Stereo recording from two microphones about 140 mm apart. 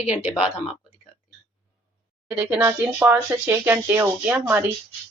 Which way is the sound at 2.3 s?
10° right (ahead or behind).